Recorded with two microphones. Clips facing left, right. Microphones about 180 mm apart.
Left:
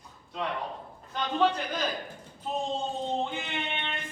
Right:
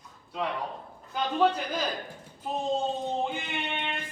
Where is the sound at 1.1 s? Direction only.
10° right (ahead or behind).